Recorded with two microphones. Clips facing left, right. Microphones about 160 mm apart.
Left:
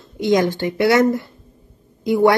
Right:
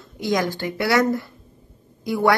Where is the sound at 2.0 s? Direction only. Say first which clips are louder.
Left 5 dB; 20° left (ahead or behind).